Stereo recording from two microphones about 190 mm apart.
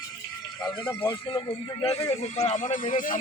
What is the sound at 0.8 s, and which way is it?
Speech, 10° left (ahead or behind).